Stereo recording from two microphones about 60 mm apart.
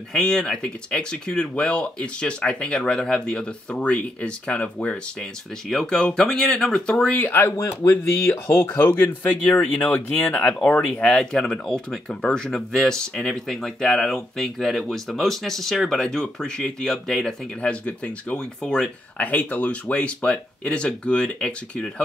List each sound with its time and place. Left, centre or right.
0.1 s speech: centre
5.7 s speech: centre
7.1 s speech: left
7.5 s speech: left
7.9 s speech: left
9.6 s speech: left
10.8 s speech: centre
17.6 s speech: centre
19.1 s speech: left